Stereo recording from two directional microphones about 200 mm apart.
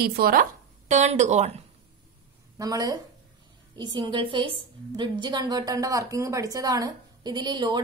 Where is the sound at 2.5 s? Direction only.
15° right (ahead or behind).